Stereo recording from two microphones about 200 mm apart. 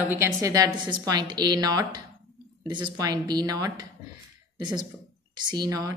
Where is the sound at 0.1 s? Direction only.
15° right (ahead or behind).